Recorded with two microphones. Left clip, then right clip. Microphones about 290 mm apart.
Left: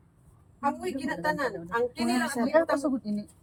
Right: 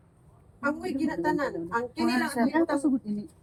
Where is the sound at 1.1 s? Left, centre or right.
Left.